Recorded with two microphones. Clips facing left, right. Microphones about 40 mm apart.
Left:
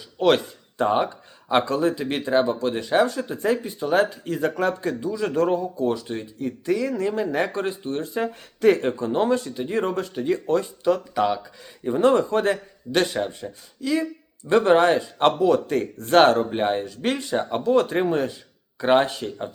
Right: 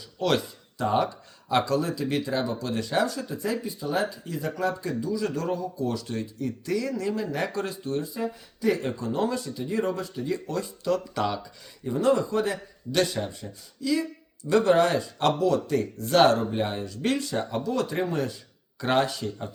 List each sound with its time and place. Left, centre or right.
0.2 s speech: left
8.0 s speech: left
11.1 s speech: centre
11.8 s speech: left